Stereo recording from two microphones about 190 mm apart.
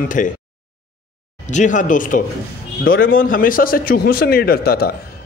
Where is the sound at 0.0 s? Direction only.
45° left (ahead or behind).